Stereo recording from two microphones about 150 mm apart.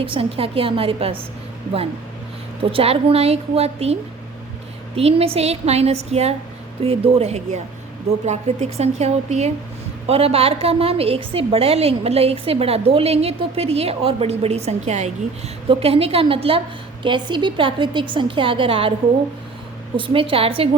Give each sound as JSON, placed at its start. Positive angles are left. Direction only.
{"t": 0.0, "sound": "a woman's voice", "side_deg": -35}
{"t": 2.6, "sound": "a woman's voice", "side_deg": -40}
{"t": 4.9, "sound": "a woman's voice", "side_deg": -40}
{"t": 20.0, "sound": "a woman's voice", "side_deg": -35}